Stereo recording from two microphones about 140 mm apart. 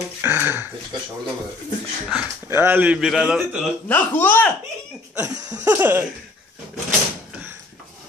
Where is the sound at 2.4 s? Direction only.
15° right (ahead or behind).